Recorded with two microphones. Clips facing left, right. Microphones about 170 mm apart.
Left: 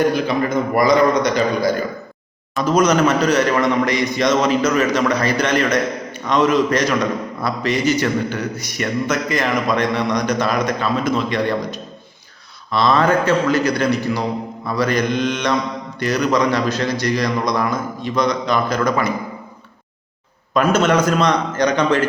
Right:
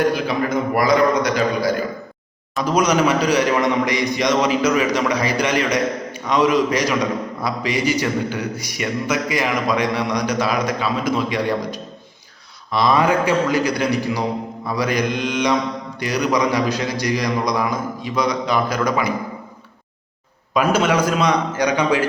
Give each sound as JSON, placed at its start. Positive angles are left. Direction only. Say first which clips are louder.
{"t": 0.1, "sound": "a man's voice", "louder": "left 2 dB", "side_deg": -5}
{"t": 12.7, "sound": "a man's voice", "louder": "left 1 dB", "side_deg": -15}
{"t": 20.5, "sound": "a man's voice", "louder": "left 2 dB", "side_deg": -10}